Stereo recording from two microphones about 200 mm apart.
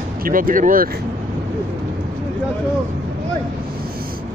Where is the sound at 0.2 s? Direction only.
45° right (ahead or behind).